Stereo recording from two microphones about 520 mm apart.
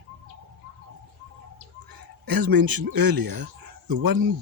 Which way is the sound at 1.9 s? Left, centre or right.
Right.